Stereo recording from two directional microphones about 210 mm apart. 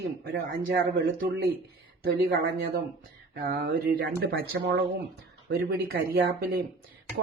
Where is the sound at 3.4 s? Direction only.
45° right (ahead or behind).